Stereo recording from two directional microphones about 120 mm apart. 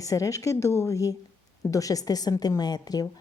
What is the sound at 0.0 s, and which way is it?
A woman's voice, 30° left (ahead or behind).